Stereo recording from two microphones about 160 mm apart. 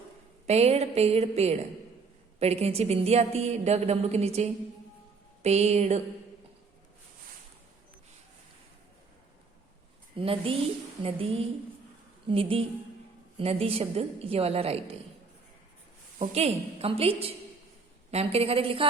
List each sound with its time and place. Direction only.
0.4 s a woman's voice: 40° right (ahead or behind)
10.2 s a woman's voice: 35° right (ahead or behind)
16.1 s a woman's voice: 45° right (ahead or behind)